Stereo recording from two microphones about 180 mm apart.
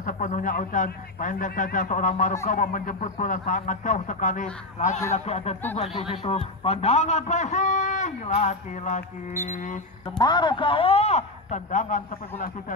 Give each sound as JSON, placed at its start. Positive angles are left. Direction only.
{"t": 0.0, "sound": "a man's voice", "side_deg": 45}
{"t": 10.1, "sound": "a man's voice", "side_deg": 25}